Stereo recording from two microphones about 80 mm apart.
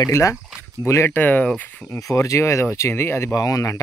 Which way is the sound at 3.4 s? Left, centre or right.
Left.